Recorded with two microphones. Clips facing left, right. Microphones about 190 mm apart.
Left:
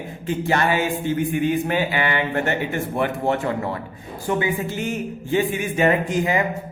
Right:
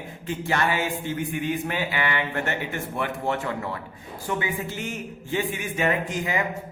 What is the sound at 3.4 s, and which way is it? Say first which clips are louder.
Speech: left 5 dB; 35° left (ahead or behind).